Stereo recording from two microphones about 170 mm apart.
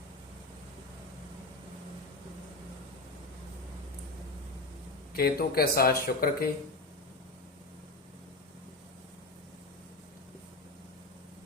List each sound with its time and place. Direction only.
5.1 s speech: 65° left (ahead or behind)